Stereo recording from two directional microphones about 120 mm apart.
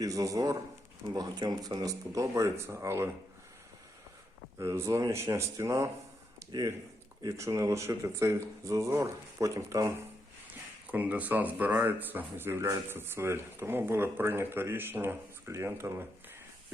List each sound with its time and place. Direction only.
0.0 s speech: 30° right (ahead or behind)
4.5 s speech: 20° right (ahead or behind)
10.5 s speech: 15° right (ahead or behind)